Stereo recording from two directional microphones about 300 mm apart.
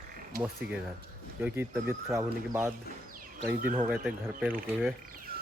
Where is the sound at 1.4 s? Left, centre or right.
Centre.